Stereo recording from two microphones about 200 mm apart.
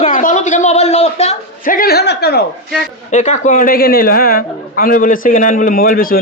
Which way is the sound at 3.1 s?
35° left (ahead or behind).